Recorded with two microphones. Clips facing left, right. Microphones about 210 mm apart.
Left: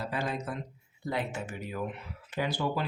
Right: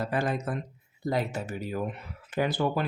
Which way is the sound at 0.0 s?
50° right (ahead or behind).